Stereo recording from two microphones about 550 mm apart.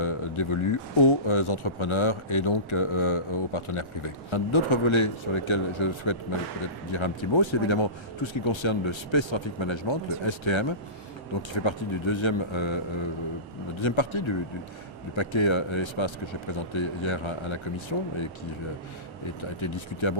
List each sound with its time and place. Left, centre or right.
0.0 s speech: left
19.4 s speech: left